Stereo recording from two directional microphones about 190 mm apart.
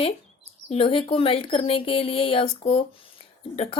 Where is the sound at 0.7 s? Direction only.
30° left (ahead or behind).